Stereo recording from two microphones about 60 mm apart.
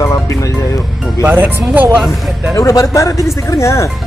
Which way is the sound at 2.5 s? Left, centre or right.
Left.